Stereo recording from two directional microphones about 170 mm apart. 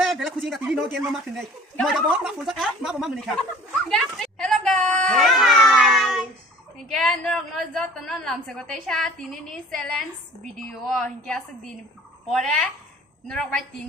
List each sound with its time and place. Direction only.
0.0 s a woman's voice: centre (ahead or behind)